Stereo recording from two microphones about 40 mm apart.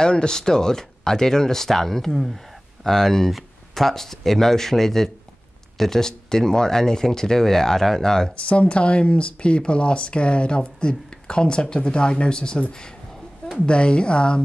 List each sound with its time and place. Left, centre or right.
0.0 s speech: centre
8.4 s speech: left
13.7 s speech: left